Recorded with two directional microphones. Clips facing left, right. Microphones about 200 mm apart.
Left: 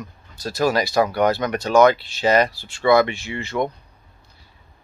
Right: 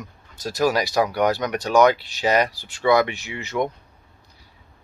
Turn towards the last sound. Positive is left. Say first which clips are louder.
# left 1 dB
turn(degrees=-10)  # may be behind; listen again after turning